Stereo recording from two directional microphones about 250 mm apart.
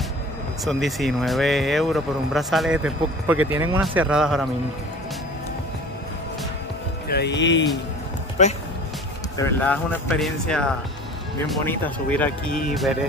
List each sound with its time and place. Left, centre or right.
0.7 s speech: centre
7.1 s speech: left
8.4 s speech: left
9.4 s speech: centre